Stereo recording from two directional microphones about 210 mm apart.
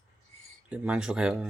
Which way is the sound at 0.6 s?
5° right (ahead or behind).